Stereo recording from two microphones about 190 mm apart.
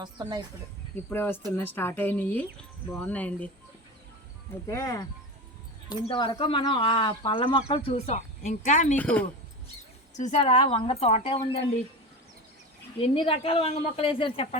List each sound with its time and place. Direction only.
0.0 s speech: 20° right (ahead or behind)
1.1 s speech: 10° left (ahead or behind)
4.6 s speech: 15° left (ahead or behind); by 9.0 s 40° left (ahead or behind)
9.0 s speech: 5° left (ahead or behind)
10.2 s a woman's voice: 35° left (ahead or behind)
13.0 s speech: 30° left (ahead or behind)